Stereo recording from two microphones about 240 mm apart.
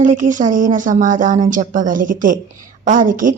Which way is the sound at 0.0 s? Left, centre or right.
Right.